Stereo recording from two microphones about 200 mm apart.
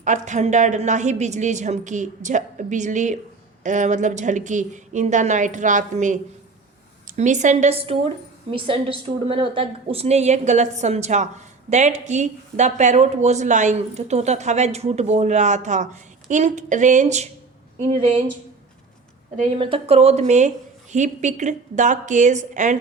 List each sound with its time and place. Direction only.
0.0 s a woman's voice: 35° right (ahead or behind)
19.5 s a woman's voice: 25° right (ahead or behind)